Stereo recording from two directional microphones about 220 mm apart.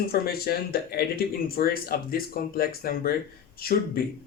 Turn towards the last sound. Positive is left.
turn(degrees=45)  # may be behind; listen again after turning